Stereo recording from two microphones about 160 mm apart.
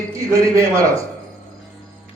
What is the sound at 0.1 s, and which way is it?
Speech, 20° right (ahead or behind).